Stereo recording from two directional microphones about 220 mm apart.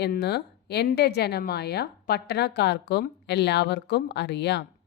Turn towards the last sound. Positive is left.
turn(degrees=50)  # may be behind; listen again after turning